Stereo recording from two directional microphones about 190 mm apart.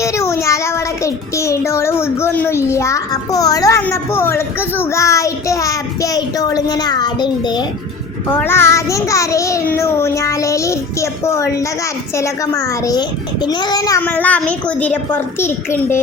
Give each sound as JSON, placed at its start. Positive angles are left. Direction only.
{"t": 0.0, "sound": "child singing", "side_deg": 15}
{"t": 8.3, "sound": "child singing", "side_deg": 10}
{"t": 12.1, "sound": "a child's voice", "side_deg": 15}
{"t": 14.0, "sound": "child singing", "side_deg": 10}